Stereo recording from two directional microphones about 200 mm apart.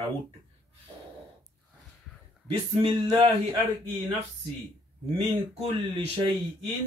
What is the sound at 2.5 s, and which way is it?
Speech, 25° right (ahead or behind).